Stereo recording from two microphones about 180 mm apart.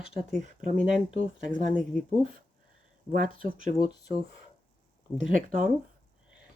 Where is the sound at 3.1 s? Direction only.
50° right (ahead or behind).